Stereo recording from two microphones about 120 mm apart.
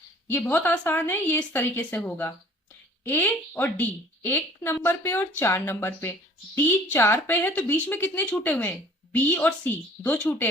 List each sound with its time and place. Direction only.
0.3 s speech: 15° left (ahead or behind)